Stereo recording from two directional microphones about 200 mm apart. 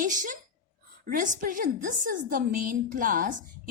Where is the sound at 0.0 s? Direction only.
40° right (ahead or behind).